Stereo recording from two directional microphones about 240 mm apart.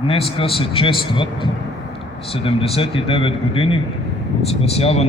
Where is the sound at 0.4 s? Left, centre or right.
Left.